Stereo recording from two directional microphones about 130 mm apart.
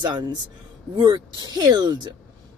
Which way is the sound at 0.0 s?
35° right (ahead or behind).